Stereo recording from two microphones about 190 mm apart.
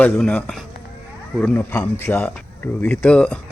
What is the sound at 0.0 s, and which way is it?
Speech, 5° left (ahead or behind).